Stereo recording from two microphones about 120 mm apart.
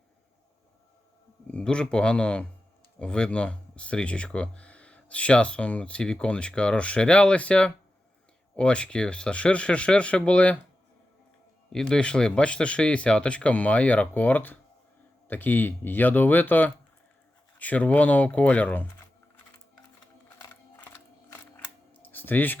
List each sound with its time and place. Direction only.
1.5 s speech: 10° left (ahead or behind)
11.7 s speech: 5° left (ahead or behind)
22.0 s a sound: 15° left (ahead or behind)